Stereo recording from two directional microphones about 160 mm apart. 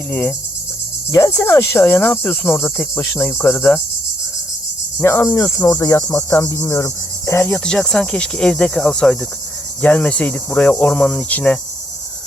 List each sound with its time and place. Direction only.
0.1 s cricket: 10° left (ahead or behind)
4.9 s cricket: 15° left (ahead or behind)